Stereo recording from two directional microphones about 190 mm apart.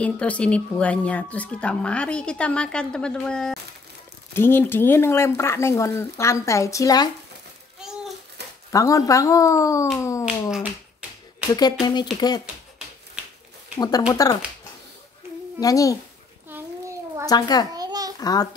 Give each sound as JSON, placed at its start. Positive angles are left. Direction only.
{"t": 0.0, "sound": "speech", "side_deg": 5}
{"t": 8.7, "sound": "speech", "side_deg": 15}
{"t": 10.5, "sound": "speech", "side_deg": -5}
{"t": 11.8, "sound": "speech", "side_deg": 25}
{"t": 13.7, "sound": "speech", "side_deg": 20}
{"t": 15.6, "sound": "speech", "side_deg": 15}
{"t": 16.5, "sound": "a sound", "side_deg": -10}
{"t": 17.3, "sound": "speech", "side_deg": 20}
{"t": 17.7, "sound": "babbling", "side_deg": -20}
{"t": 18.2, "sound": "speech", "side_deg": 20}